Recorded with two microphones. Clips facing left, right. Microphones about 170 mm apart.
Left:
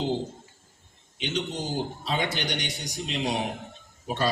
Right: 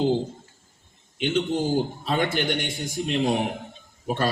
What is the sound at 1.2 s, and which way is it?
A man's voice, 55° right (ahead or behind).